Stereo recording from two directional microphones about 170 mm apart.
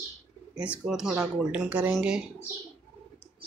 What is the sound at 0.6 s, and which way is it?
Speech, 5° right (ahead or behind).